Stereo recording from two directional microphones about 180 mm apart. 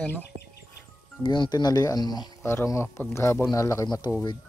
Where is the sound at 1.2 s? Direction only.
25° left (ahead or behind).